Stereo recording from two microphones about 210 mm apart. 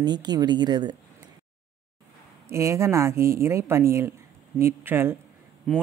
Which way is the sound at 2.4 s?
15° right (ahead or behind).